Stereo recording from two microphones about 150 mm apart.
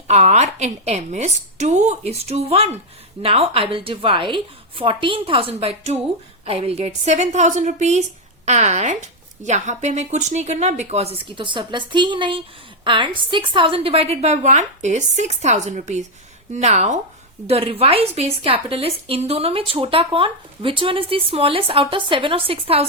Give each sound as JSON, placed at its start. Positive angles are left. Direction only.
{"t": 0.1, "sound": "a woman's voice", "side_deg": -50}
{"t": 17.4, "sound": "a woman's voice", "side_deg": -40}